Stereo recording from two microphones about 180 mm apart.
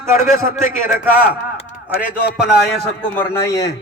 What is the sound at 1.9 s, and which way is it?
Speech, 55° left (ahead or behind).